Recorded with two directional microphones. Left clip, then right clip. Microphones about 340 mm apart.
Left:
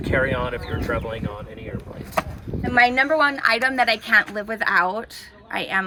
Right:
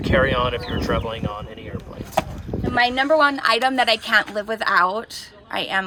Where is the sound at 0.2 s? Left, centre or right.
Centre.